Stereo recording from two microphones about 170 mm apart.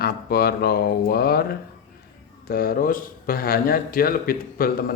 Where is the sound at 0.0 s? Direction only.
65° left (ahead or behind).